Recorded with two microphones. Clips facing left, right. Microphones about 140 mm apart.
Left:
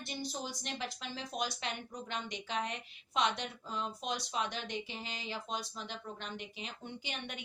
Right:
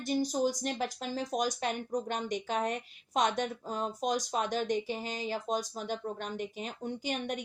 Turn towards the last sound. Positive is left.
turn(degrees=-45)  # may be behind; listen again after turning